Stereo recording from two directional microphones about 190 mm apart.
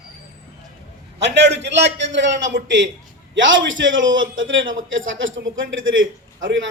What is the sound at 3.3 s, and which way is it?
A man's voice, 80° right.